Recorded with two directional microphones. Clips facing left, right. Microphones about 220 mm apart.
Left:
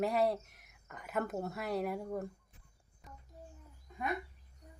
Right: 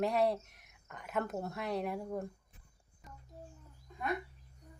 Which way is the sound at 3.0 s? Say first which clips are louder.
Even; centre (ahead or behind).